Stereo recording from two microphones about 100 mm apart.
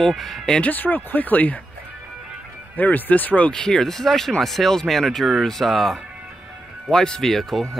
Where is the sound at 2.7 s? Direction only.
15° left (ahead or behind).